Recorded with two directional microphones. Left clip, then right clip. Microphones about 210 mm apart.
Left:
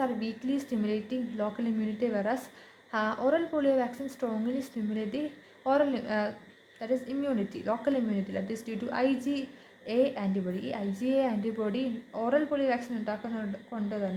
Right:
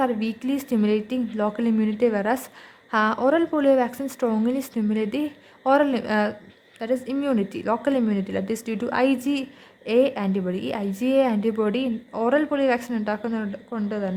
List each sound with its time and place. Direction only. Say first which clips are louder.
0.0 s a woman's voice: right 8 dB; 40° right (ahead or behind)